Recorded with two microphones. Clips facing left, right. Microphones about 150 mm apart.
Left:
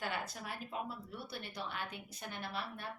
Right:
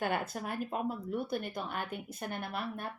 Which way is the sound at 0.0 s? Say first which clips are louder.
Right 7 dB; 50° right (ahead or behind).